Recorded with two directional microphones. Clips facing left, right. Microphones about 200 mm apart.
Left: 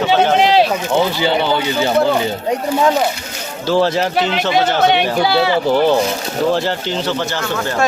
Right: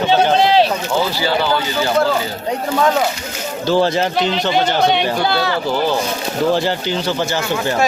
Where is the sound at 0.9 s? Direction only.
20° left (ahead or behind).